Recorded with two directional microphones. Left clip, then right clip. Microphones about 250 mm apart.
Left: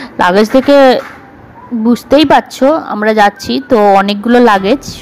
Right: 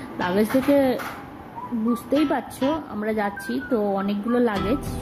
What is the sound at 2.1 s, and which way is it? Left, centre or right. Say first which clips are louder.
Speech: left 17 dB; left.